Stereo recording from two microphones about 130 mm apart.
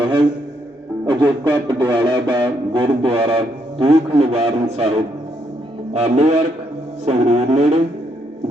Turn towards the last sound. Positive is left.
turn(degrees=-55)  # may be behind; listen again after turning